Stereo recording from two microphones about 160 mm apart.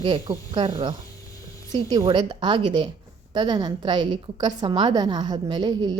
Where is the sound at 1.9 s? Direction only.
25° right (ahead or behind).